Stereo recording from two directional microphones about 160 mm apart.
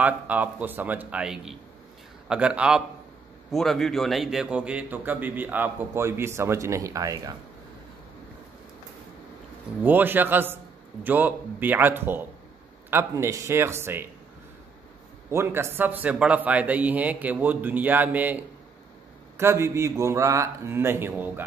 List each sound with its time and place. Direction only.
0.0 s a man's voice: 10° right (ahead or behind)
9.8 s a man's voice: 10° right (ahead or behind)
15.3 s a man's voice: 15° right (ahead or behind)